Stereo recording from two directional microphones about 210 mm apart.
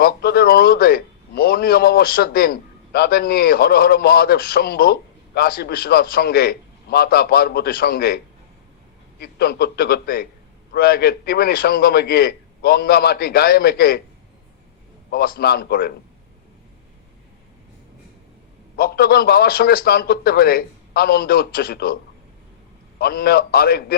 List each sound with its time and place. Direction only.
0.0 s a man's voice: 50° left (ahead or behind)
15.1 s a man's voice: 45° left (ahead or behind)
18.8 s a man's voice: 45° left (ahead or behind)
23.0 s a man's voice: 45° left (ahead or behind)